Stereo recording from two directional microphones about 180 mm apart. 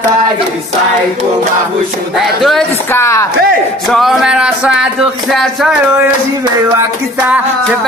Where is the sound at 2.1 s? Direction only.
Centre (ahead or behind).